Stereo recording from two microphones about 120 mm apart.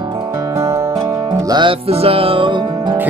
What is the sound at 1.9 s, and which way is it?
Music, 55° right (ahead or behind).